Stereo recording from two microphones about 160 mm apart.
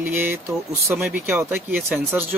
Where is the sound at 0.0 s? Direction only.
15° right (ahead or behind).